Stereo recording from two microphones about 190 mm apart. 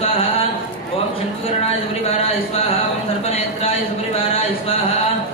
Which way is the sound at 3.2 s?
30° left (ahead or behind).